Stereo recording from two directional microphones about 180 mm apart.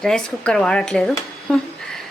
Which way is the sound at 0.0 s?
5° left (ahead or behind).